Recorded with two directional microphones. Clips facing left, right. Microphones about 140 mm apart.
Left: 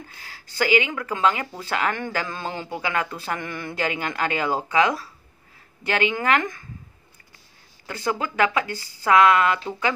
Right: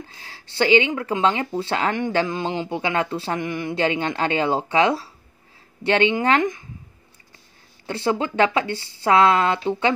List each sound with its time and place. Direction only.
0.2 s speech: 30° right (ahead or behind)
7.8 s speech: 30° right (ahead or behind)